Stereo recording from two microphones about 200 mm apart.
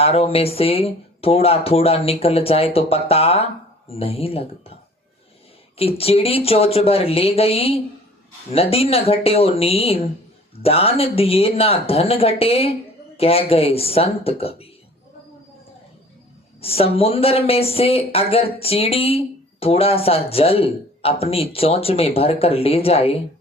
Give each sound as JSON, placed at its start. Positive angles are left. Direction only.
{"t": 0.0, "sound": "speech", "side_deg": 30}
{"t": 5.7, "sound": "speech", "side_deg": 30}
{"t": 16.6, "sound": "speech", "side_deg": 30}